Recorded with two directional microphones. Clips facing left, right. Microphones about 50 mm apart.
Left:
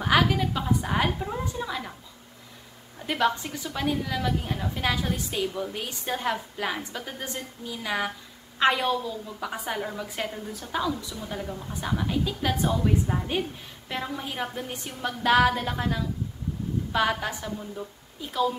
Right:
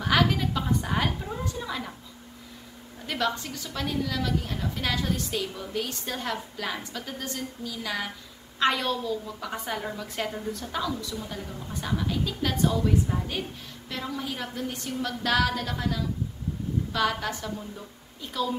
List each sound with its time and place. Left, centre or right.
0.0 s a woman's voice: centre
3.1 s a woman's voice: centre